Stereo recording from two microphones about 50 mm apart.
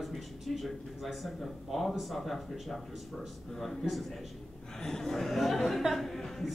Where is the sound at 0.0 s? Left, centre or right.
Centre.